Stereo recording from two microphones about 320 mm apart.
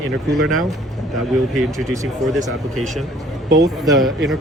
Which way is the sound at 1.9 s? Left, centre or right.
Centre.